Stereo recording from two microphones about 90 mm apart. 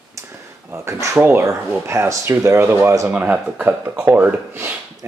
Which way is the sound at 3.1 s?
15° right (ahead or behind).